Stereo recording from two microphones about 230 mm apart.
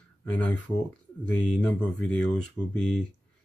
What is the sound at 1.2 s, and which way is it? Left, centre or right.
Speech, centre.